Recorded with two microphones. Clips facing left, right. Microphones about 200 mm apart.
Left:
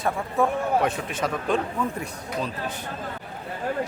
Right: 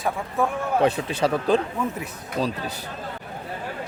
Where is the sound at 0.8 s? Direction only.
35° right (ahead or behind).